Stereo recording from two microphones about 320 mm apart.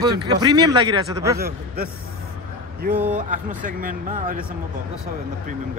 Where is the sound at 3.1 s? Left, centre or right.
Right.